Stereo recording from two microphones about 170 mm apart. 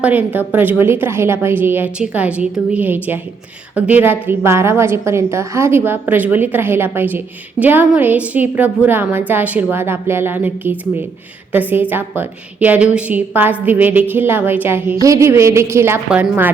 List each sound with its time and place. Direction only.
0.0 s a woman's voice: 10° right (ahead or behind)